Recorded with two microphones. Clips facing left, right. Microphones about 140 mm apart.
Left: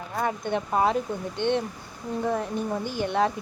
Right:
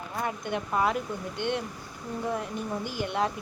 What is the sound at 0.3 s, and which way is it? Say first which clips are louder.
Speech: left 4 dB; 30° left (ahead or behind).